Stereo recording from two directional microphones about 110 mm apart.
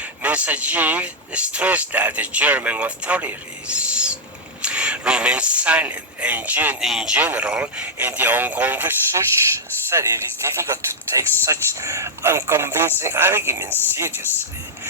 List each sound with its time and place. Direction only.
0.2 s speech: 15° right (ahead or behind)